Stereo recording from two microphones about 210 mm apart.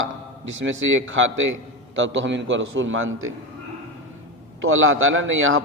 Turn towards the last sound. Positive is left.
turn(degrees=-70)  # may be behind; listen again after turning